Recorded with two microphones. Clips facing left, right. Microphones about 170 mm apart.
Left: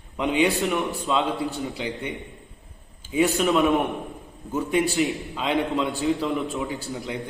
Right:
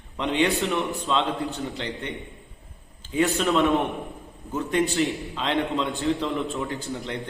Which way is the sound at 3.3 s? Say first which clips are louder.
Even; centre (ahead or behind).